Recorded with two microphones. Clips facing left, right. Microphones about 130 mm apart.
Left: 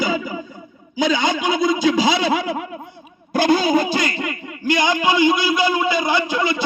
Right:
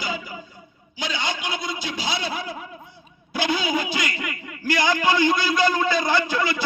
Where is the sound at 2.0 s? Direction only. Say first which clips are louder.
Left 10 dB; 90° left.